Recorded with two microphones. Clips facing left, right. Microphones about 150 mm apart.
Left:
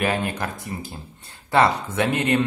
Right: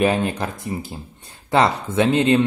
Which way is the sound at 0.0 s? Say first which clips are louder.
Right 5 dB; 25° right (ahead or behind).